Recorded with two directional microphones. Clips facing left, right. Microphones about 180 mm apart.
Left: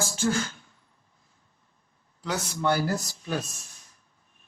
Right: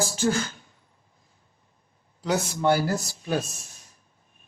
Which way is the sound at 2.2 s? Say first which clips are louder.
Right 4 dB; 20° right (ahead or behind).